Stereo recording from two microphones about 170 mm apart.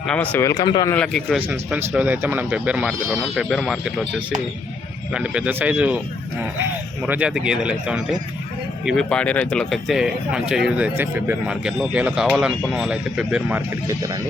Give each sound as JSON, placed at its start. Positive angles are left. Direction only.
{"t": 0.0, "sound": "speech", "side_deg": 5}
{"t": 0.9, "sound": "speech", "side_deg": 5}
{"t": 1.5, "sound": "speech", "side_deg": -5}
{"t": 5.1, "sound": "speech", "side_deg": -5}
{"t": 7.0, "sound": "speech", "side_deg": -5}